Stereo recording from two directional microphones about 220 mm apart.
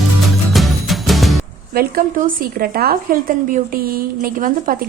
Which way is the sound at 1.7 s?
40° right (ahead or behind).